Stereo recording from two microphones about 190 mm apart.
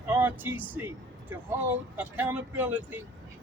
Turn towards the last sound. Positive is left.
turn(degrees=-10)  # may be behind; listen again after turning